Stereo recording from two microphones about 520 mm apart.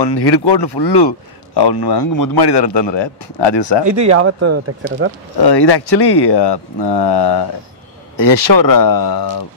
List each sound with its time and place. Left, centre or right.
0.0 s speech: left
3.8 s speech: right
5.4 s speech: left